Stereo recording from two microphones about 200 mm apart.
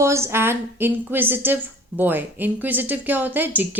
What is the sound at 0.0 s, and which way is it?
Speech, 15° right (ahead or behind).